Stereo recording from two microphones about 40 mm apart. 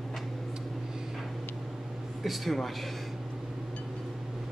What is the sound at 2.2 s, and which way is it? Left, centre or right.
Speech, centre.